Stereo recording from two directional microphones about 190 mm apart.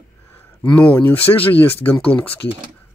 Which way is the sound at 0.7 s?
10° left (ahead or behind).